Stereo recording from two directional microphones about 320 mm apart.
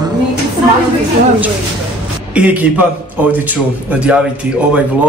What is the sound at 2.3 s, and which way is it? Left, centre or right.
Speech, centre.